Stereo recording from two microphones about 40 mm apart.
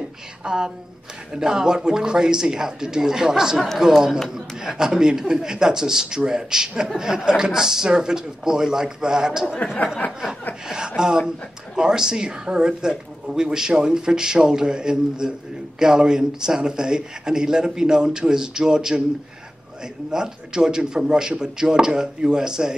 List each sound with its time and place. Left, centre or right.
0.4 s speech: centre
11.0 s speech: centre
20.1 s speech: centre